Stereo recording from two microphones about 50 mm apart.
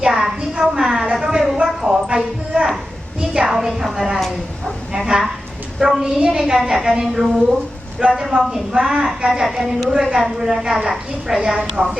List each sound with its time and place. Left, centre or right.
0.0 s a sound: centre
3.8 s a woman's voice: centre
5.8 s a woman's voice: centre
8.3 s a woman's voice: centre
9.0 s a woman's voice: centre